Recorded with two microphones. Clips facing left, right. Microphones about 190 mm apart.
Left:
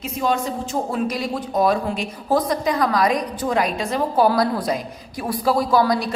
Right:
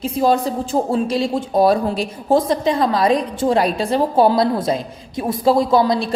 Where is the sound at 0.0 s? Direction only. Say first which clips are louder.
Right 5 dB; 35° right (ahead or behind).